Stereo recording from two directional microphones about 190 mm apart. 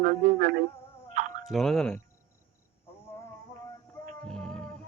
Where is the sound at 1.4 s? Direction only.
Centre (ahead or behind).